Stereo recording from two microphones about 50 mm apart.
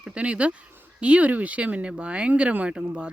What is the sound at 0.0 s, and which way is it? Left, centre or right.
Speech, right.